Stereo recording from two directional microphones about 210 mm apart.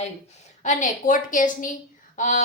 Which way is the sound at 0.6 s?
35° left (ahead or behind).